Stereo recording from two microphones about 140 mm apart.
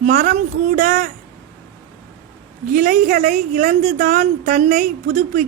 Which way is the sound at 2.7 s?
65° right (ahead or behind).